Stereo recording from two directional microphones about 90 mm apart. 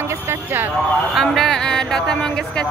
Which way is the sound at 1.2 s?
5° left (ahead or behind).